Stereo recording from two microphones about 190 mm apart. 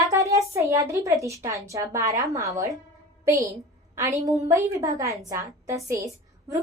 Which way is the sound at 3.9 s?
15° right (ahead or behind).